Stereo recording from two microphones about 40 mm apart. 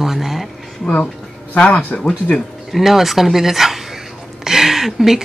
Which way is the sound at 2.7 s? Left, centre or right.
Centre.